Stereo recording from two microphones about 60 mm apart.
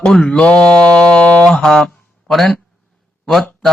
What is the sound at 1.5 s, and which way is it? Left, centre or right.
Speech, centre.